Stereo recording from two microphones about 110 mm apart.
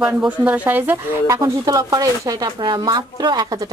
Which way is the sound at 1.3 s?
35° right (ahead or behind).